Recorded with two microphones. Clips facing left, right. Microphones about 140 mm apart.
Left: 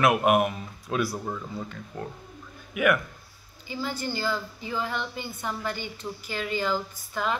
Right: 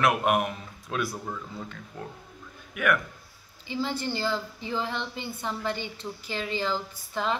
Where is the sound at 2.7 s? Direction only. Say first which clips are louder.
Left 3 dB; 5° left (ahead or behind).